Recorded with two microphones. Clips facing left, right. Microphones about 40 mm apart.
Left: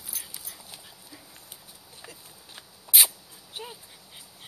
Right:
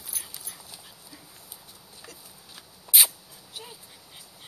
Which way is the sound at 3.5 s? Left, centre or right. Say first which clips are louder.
Left 3 dB; centre.